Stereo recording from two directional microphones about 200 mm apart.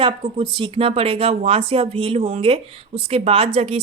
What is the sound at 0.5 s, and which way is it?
Speech, 25° right (ahead or behind).